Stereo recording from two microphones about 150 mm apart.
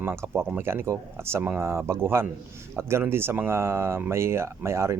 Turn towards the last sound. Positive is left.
turn(degrees=-20)  # may be behind; listen again after turning